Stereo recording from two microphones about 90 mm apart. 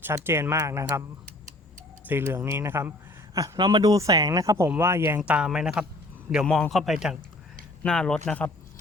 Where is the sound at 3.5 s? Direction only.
55° right (ahead or behind); by 4.6 s 40° right (ahead or behind).